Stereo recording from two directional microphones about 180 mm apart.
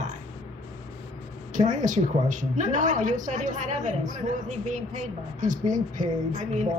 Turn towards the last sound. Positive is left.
turn(degrees=-45)  # may be behind; listen again after turning